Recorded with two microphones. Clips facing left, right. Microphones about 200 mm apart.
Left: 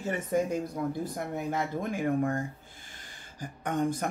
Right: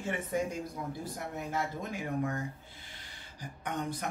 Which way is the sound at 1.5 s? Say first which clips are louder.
Left 3 dB; 55° left (ahead or behind).